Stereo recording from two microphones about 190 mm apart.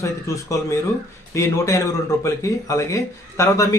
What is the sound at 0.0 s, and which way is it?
A man's voice, 15° left (ahead or behind).